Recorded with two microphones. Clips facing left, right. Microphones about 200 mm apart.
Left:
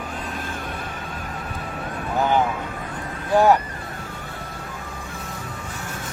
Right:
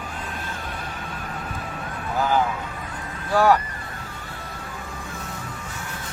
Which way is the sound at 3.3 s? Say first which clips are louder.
Left 2 dB; 20° left (ahead or behind).